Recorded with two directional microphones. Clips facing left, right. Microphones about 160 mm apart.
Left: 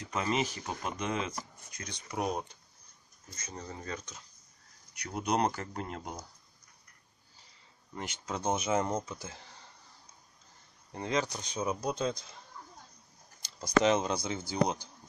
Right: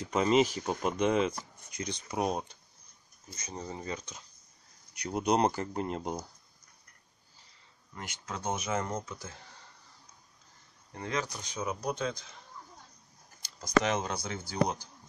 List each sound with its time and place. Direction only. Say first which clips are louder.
0.1 s speech: right 7 dB; 20° right (ahead or behind)
3.3 s speech: right 3 dB; 20° right (ahead or behind)
7.9 s speech: left 3 dB; 20° left (ahead or behind)
10.9 s speech: left 3 dB; 20° left (ahead or behind)
13.6 s speech: left 2 dB; 25° left (ahead or behind)